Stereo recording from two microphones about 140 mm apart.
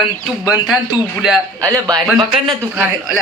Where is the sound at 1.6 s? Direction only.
25° right (ahead or behind).